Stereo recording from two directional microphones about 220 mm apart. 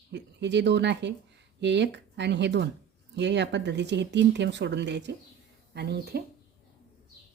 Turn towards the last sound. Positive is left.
turn(degrees=-45)  # may be behind; listen again after turning